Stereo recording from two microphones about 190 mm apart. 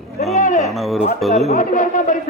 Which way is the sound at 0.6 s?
Centre (ahead or behind).